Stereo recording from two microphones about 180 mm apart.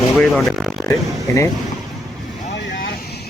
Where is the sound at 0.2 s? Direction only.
Centre (ahead or behind).